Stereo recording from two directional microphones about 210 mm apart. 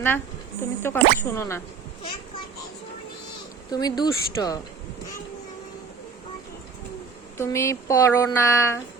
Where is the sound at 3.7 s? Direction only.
20° left (ahead or behind).